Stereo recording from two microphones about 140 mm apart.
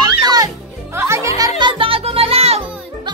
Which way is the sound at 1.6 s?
35° right (ahead or behind).